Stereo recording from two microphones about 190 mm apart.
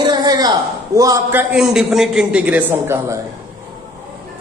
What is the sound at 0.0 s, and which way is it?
A man's voice, 20° right (ahead or behind).